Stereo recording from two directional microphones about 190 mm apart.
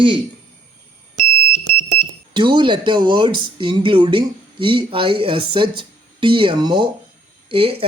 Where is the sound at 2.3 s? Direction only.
25° right (ahead or behind).